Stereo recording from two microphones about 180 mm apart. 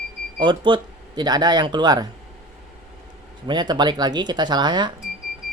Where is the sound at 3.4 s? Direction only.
25° right (ahead or behind).